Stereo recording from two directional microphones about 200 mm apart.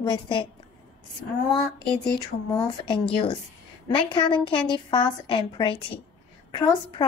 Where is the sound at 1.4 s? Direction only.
20° left (ahead or behind).